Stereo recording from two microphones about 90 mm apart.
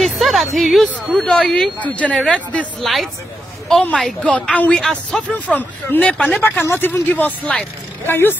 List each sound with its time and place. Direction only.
0.0 s a woman's voice: centre (ahead or behind)
2.8 s a woman's voice: centre (ahead or behind)
5.5 s a woman's voice: 20° left (ahead or behind)
6.1 s a woman's voice: 5° left (ahead or behind)
6.6 s speech: 25° left (ahead or behind)